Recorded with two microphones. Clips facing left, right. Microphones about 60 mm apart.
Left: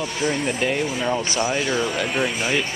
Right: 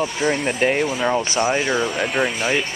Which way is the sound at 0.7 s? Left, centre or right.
Centre.